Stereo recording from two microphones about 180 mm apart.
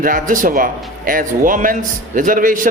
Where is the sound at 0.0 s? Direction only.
50° right (ahead or behind).